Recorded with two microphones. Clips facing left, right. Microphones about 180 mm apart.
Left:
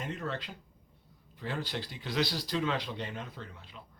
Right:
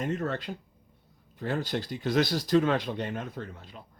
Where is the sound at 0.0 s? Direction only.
45° right (ahead or behind).